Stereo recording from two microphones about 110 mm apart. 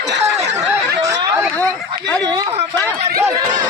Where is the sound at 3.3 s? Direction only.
35° right (ahead or behind).